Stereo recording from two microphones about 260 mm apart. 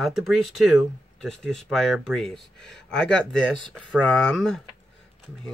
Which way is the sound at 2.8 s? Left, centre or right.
Centre.